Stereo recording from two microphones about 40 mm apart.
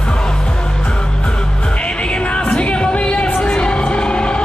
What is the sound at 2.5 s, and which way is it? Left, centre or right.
Music, left.